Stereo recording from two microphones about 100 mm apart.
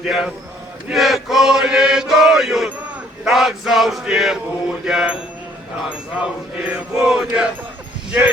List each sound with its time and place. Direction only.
0.0 s chant: 5° right (ahead or behind)
6.1 s chant: 10° right (ahead or behind)